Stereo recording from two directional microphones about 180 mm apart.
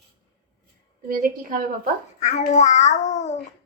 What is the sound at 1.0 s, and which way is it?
Child singing, 50° right (ahead or behind).